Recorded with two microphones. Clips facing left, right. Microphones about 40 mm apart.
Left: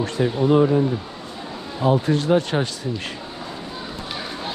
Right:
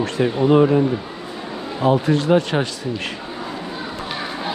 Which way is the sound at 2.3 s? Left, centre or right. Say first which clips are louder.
Right 2 dB; right.